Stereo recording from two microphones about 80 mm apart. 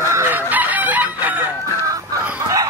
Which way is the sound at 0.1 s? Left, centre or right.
Right.